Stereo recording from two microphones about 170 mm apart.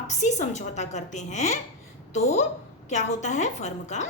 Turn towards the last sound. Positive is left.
turn(degrees=45)  # may be behind; listen again after turning